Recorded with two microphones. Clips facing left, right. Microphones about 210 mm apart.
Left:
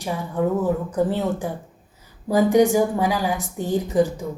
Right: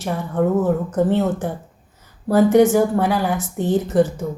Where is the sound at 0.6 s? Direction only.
10° left (ahead or behind).